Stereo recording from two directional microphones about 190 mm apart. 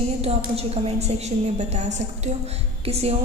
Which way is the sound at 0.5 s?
35° right (ahead or behind).